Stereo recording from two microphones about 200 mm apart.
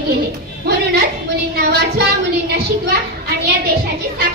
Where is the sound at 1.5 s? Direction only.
55° right (ahead or behind).